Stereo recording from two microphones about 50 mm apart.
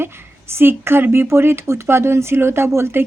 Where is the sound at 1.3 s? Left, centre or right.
Right.